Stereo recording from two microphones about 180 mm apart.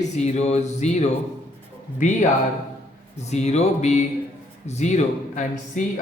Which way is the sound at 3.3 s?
35° left (ahead or behind).